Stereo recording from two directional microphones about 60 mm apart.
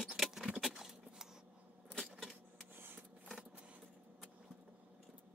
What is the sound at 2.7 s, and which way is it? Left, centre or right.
Printer, right.